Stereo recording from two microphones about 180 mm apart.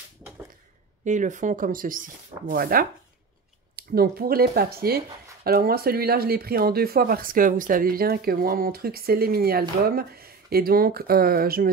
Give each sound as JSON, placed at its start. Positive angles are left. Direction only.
{"t": 1.0, "sound": "speech", "side_deg": -45}